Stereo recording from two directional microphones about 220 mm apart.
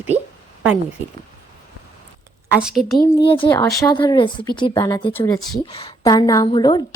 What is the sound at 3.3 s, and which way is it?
Speech, 20° left (ahead or behind).